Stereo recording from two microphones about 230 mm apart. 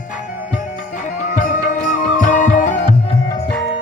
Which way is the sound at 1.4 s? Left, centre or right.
Left.